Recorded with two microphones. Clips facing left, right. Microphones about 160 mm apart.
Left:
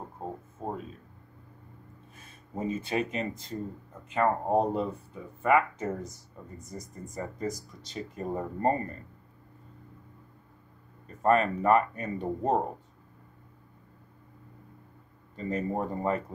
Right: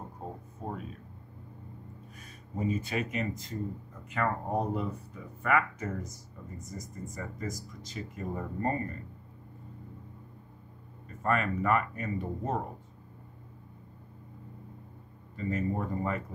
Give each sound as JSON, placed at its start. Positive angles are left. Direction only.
{"t": 0.6, "sound": "a sound", "side_deg": 35}
{"t": 2.1, "sound": "speech", "side_deg": 30}
{"t": 11.2, "sound": "speech", "side_deg": 30}
{"t": 15.3, "sound": "speech", "side_deg": 30}